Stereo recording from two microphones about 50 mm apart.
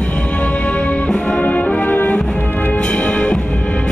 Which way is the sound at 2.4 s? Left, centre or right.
Left.